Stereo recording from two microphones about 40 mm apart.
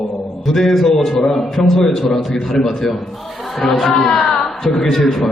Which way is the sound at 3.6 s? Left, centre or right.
Centre.